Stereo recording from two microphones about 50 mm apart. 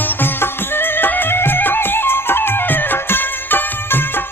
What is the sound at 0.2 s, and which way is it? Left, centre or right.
Music, left.